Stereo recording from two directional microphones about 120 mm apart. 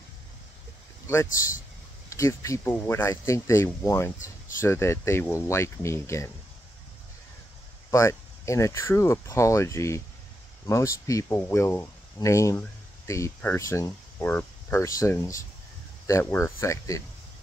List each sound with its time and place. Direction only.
1.0 s speech: 25° left (ahead or behind)
7.9 s speech: 25° left (ahead or behind)